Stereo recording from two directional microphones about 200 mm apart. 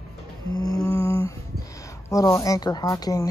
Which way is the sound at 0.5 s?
20° left (ahead or behind).